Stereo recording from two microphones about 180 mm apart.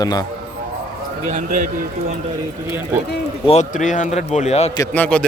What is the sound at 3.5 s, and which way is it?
A man's voice, 40° left (ahead or behind).